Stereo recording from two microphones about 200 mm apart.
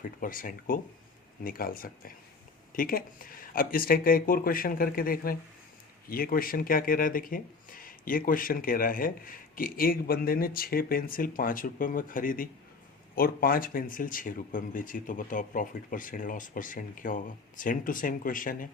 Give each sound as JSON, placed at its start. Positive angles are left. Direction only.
{"t": 0.2, "sound": "speech", "side_deg": 45}